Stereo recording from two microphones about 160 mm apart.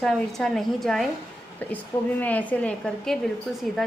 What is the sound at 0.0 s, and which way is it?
A woman's voice, 5° left (ahead or behind).